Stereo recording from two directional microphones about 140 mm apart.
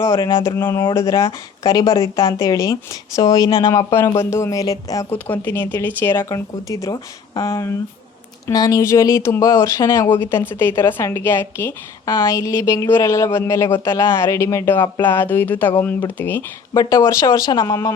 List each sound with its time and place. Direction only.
0.0 s a woman's voice: 20° left (ahead or behind)
5.1 s a woman's voice: 15° left (ahead or behind)